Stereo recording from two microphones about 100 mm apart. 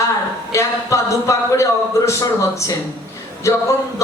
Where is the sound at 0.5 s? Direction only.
30° left (ahead or behind).